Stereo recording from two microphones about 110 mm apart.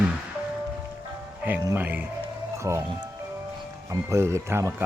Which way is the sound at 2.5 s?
25° right (ahead or behind).